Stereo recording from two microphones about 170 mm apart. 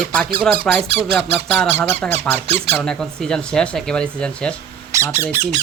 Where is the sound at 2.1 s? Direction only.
40° right (ahead or behind).